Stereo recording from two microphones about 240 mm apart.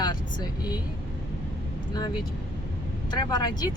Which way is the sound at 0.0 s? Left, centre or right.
Centre.